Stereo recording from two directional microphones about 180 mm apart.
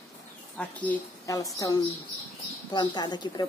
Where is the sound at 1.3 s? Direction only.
20° left (ahead or behind).